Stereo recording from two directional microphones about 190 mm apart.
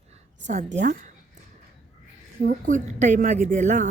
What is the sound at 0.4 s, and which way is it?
Speech, 40° right (ahead or behind).